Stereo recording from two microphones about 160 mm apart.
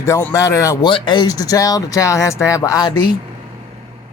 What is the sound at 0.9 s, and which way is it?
Speech, 30° left (ahead or behind).